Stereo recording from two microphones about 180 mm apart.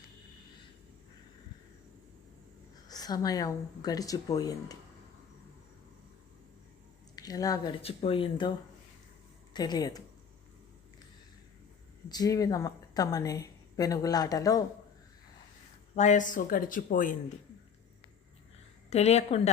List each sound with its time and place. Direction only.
2.9 s a woman's voice: 20° left (ahead or behind)
7.2 s speech: 20° left (ahead or behind)
7.8 s a woman's voice: 30° left (ahead or behind)
12.0 s a woman's voice: 20° left (ahead or behind)
16.0 s speech: 45° left (ahead or behind)
18.9 s a woman's voice: 35° left (ahead or behind)